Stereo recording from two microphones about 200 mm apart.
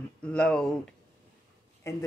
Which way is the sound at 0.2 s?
5° left (ahead or behind).